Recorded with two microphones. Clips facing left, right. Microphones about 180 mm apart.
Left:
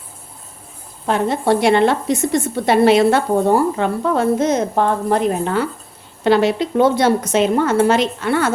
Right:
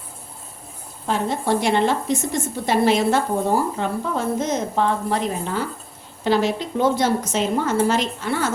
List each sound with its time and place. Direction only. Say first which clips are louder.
1.0 s a woman's voice: left 5 dB; 65° left (ahead or behind)
4.7 s a woman's voice: left 4 dB; 50° left (ahead or behind); by 8.5 s 65° left (ahead or behind)